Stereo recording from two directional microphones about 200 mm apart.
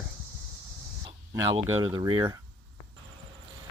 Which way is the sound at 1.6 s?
20° right (ahead or behind).